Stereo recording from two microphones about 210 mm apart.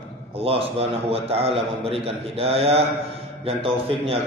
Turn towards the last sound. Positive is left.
turn(degrees=-25)  # may be behind; listen again after turning